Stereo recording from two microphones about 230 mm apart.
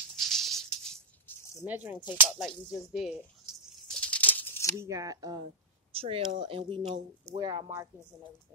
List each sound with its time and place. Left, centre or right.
0.0 s patter: centre
1.6 s speech: centre
3.8 s tearing: centre
4.7 s speech: centre